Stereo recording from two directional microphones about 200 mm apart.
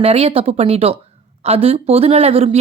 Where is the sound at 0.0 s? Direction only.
30° right (ahead or behind).